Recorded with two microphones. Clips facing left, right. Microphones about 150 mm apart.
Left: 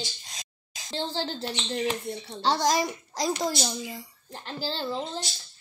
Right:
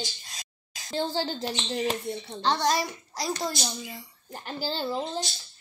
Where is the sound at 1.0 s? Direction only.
10° right (ahead or behind).